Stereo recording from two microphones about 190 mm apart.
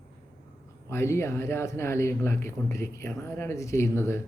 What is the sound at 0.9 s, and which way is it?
Speech, 15° left (ahead or behind).